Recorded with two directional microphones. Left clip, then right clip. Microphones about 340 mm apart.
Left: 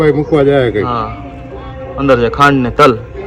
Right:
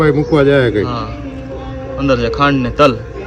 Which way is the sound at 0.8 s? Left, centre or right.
Left.